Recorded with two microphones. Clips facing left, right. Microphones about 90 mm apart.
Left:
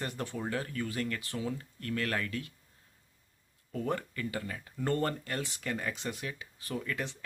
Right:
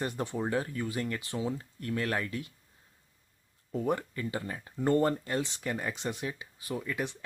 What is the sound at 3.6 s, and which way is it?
Speech, 20° right (ahead or behind).